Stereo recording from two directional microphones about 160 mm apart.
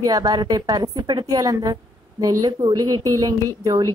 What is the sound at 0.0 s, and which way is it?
A woman's voice, 25° right (ahead or behind).